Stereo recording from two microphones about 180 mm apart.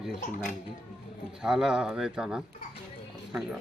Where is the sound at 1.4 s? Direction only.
5° right (ahead or behind).